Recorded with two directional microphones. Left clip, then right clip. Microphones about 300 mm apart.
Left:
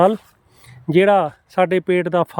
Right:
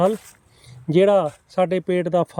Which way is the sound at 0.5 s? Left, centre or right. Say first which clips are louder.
Left 3 dB; centre.